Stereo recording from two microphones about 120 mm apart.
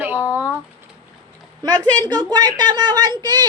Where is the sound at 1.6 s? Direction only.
35° right (ahead or behind).